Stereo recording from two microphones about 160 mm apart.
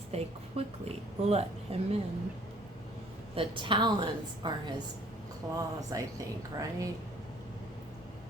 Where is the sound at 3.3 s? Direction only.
30° right (ahead or behind).